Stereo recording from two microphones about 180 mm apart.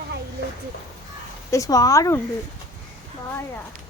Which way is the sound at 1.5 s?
20° left (ahead or behind).